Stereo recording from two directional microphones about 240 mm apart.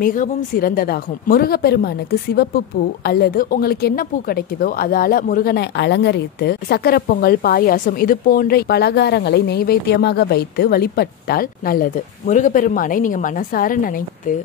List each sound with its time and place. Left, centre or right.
0.0 s a woman's voice: left